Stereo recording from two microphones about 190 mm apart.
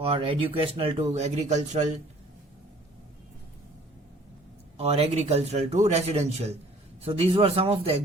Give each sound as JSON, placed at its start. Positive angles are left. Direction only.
{"t": 0.0, "sound": "speech", "side_deg": -30}
{"t": 4.8, "sound": "speech", "side_deg": -30}